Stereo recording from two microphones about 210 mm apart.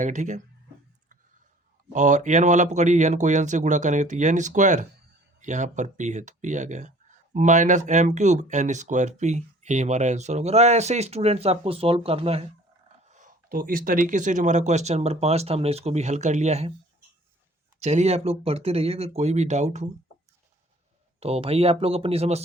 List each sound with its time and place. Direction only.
0.0 s speech: 35° right (ahead or behind)
1.9 s speech: 35° right (ahead or behind)
17.7 s speech: 30° right (ahead or behind)
21.2 s speech: 30° right (ahead or behind)